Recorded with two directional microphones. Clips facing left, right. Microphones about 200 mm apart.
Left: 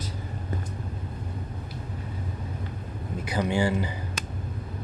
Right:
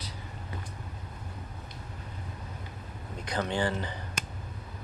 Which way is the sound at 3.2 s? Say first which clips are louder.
Left 4 dB; 10° left (ahead or behind).